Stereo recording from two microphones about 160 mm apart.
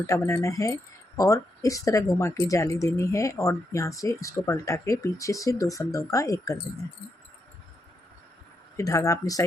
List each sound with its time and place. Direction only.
0.0 s speech: 20° left (ahead or behind)
8.7 s speech: 20° left (ahead or behind)